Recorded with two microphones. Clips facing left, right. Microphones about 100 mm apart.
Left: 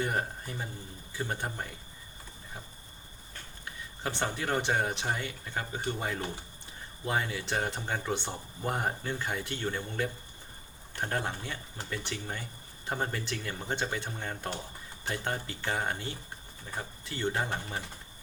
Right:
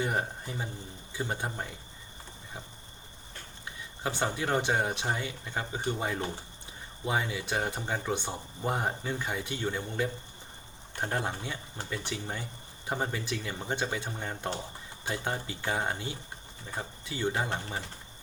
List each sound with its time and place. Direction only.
0.0 s speech: 15° right (ahead or behind)
4.3 s speech: 20° right (ahead or behind)
7.0 s speech: 10° right (ahead or behind)